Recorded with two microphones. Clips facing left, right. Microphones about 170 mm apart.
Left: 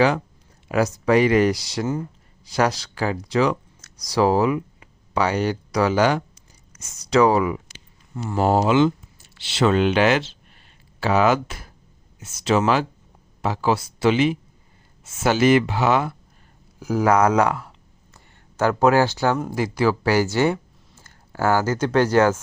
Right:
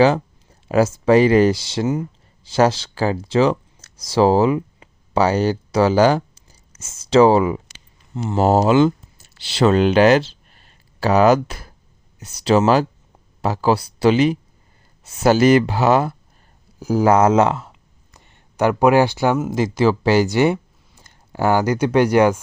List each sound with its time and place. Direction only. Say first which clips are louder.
0.7 s speech: right 4 dB; 30° right (ahead or behind)
6.7 s a sound: right 2 dB; 30° right (ahead or behind)
7.1 s speech: right 4 dB; 30° right (ahead or behind)
8.4 s speech: right 3 dB; 40° right (ahead or behind); by 22.4 s 15° right (ahead or behind)